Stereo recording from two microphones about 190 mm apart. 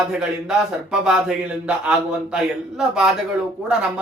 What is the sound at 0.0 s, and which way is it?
Speech, 5° right (ahead or behind).